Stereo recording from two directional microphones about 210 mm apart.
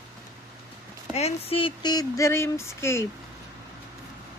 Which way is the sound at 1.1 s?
30° left (ahead or behind).